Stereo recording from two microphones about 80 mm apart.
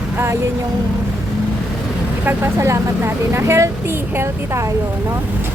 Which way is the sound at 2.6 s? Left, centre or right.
Right.